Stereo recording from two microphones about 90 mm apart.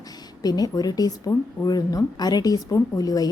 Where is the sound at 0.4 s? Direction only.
45° left (ahead or behind).